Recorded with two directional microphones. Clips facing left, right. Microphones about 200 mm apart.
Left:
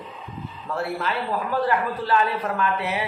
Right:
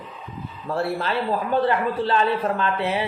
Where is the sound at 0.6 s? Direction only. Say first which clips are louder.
Right 3 dB; 30° right (ahead or behind).